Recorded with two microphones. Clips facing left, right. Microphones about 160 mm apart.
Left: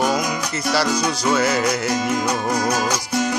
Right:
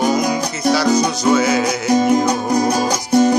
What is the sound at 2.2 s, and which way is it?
Music, 35° right (ahead or behind).